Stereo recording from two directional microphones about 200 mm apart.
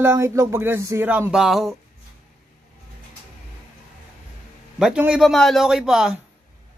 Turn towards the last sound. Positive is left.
turn(degrees=0)  # may be behind; listen again after turning